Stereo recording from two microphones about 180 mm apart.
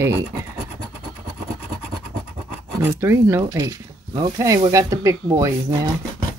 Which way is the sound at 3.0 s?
15° right (ahead or behind).